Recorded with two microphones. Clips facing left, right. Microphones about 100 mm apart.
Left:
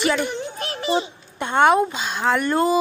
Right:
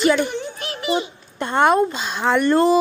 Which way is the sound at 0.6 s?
30° left (ahead or behind).